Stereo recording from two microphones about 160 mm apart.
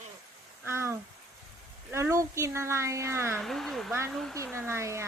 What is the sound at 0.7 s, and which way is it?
Speech, 15° right (ahead or behind).